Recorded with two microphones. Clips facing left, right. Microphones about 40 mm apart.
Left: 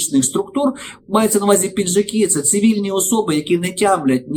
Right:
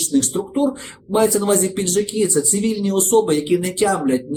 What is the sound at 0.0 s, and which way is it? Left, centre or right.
Speech, left.